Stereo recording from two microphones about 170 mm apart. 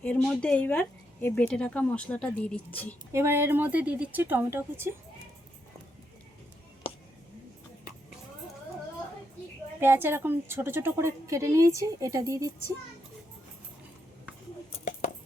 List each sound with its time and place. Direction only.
0.0 s speech: 10° left (ahead or behind)
3.1 s a woman's voice: 15° right (ahead or behind)
6.8 s music: 35° left (ahead or behind)
9.8 s a woman's voice: 15° right (ahead or behind)